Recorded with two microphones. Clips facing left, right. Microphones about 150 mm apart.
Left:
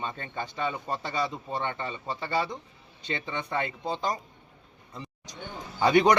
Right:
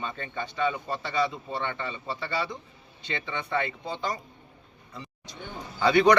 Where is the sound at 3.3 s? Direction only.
40° left (ahead or behind).